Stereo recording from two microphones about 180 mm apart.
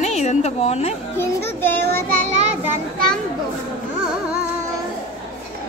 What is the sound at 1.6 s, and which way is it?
Child singing, 10° left (ahead or behind).